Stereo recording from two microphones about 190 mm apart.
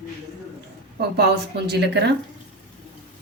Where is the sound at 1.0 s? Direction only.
60° right (ahead or behind).